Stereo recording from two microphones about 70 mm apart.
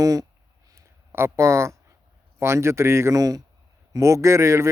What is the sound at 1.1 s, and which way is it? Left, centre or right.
Speech, right.